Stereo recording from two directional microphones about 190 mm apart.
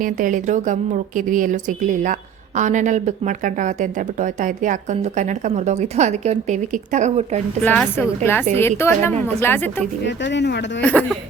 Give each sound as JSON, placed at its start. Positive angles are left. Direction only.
{"t": 0.0, "sound": "a woman's voice", "side_deg": -45}
{"t": 7.6, "sound": "speech", "side_deg": 10}
{"t": 10.0, "sound": "speech", "side_deg": 65}
{"t": 10.8, "sound": "speech", "side_deg": 5}